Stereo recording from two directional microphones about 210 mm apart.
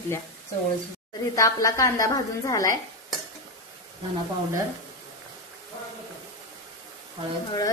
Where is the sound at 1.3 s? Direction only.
15° left (ahead or behind).